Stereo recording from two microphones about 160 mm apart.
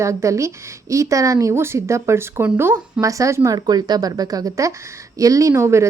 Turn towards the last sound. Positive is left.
turn(degrees=-15)  # may be behind; listen again after turning